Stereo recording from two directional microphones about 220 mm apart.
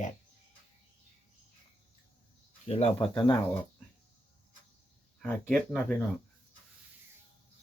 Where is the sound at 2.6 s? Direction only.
25° left (ahead or behind).